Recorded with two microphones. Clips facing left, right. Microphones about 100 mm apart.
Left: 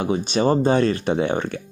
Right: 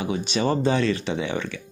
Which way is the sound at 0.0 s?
45° left (ahead or behind).